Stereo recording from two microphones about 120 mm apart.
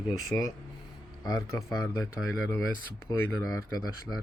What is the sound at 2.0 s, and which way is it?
Speech, 20° left (ahead or behind).